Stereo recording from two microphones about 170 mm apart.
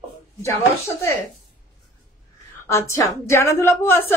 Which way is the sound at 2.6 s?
15° left (ahead or behind).